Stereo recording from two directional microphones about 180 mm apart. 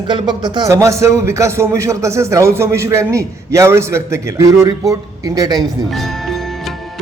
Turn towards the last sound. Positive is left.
turn(degrees=0)  # may be behind; listen again after turning